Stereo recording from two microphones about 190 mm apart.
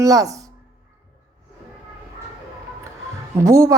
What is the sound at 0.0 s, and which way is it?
Speech, 15° right (ahead or behind).